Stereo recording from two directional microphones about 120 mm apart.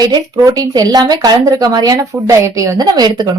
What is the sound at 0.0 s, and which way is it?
Speech, 35° right (ahead or behind).